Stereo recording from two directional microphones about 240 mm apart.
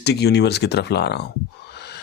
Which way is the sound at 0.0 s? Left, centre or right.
Left.